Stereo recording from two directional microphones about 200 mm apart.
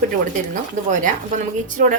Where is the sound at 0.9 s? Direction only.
40° right (ahead or behind).